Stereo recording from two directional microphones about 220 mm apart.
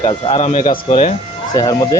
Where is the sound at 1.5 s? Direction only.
20° left (ahead or behind).